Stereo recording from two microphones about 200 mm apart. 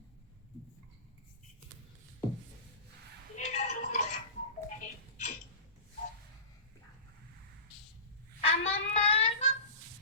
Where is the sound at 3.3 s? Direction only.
35° left (ahead or behind).